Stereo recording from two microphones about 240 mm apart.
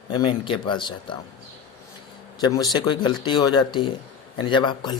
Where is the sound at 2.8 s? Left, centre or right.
Centre.